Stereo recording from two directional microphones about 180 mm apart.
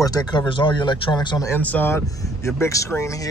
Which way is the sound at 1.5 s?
10° left (ahead or behind).